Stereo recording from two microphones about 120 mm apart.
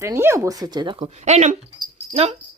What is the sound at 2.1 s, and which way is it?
Speech, 60° right (ahead or behind).